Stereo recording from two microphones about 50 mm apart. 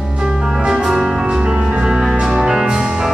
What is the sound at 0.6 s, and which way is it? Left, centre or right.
Music, centre.